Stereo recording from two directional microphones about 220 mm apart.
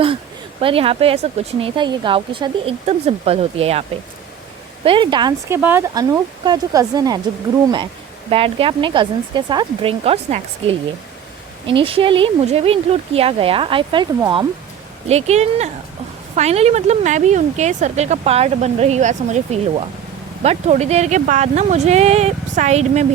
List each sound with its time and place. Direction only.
0.6 s speech: 25° right (ahead or behind)
5.5 s speech: 10° right (ahead or behind)
8.3 s speech: 25° right (ahead or behind)
15.0 s speech: 30° right (ahead or behind)